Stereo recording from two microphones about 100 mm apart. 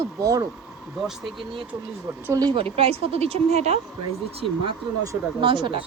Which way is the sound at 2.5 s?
70° right (ahead or behind).